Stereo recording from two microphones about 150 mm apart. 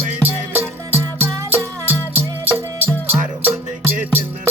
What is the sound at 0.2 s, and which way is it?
Music, 15° right (ahead or behind).